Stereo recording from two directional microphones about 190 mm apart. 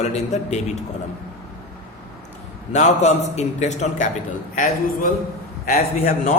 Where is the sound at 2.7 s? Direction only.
35° left (ahead or behind).